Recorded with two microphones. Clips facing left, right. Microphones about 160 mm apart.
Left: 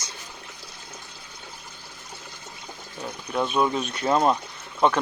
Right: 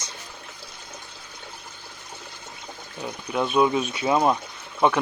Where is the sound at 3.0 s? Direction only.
Centre (ahead or behind).